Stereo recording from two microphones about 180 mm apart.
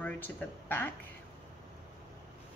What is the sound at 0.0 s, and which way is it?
Speech, 10° left (ahead or behind).